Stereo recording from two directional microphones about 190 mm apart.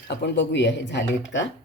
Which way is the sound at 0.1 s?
65° left (ahead or behind).